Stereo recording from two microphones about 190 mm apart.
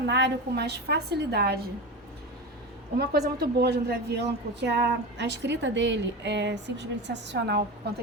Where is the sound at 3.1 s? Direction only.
55° right (ahead or behind).